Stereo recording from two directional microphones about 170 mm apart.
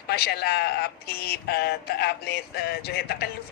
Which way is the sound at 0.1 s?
70° left (ahead or behind).